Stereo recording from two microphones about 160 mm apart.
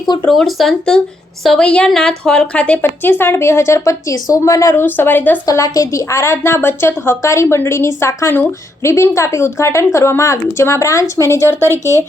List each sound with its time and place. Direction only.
0.3 s a woman's voice: centre (ahead or behind)
5.5 s a woman's voice: 20° left (ahead or behind)